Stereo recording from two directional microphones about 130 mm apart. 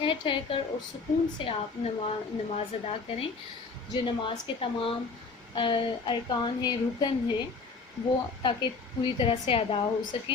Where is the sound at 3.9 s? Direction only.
40° left (ahead or behind).